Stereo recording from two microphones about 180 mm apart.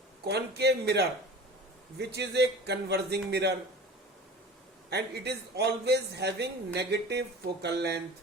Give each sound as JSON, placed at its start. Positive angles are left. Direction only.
{"t": 0.3, "sound": "a man's voice", "side_deg": -65}
{"t": 4.9, "sound": "a man's voice", "side_deg": -65}